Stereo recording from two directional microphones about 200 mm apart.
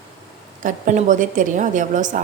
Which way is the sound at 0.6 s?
40° right (ahead or behind).